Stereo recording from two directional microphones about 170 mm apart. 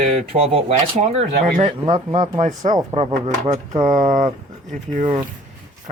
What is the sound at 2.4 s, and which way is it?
Speech, 45° right (ahead or behind).